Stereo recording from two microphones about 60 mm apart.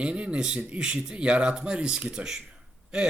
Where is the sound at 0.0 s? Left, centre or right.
Centre.